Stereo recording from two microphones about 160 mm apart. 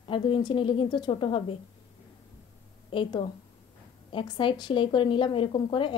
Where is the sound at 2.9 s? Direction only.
30° left (ahead or behind).